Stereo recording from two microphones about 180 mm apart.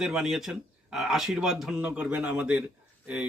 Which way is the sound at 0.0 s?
5° right (ahead or behind).